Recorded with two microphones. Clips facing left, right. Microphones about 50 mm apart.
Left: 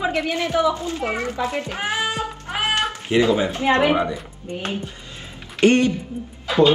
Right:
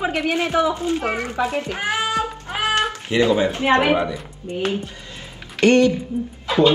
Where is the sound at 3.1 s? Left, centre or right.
Left.